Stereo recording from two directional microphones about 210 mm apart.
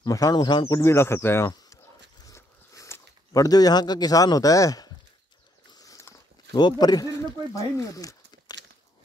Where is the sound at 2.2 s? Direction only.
15° left (ahead or behind).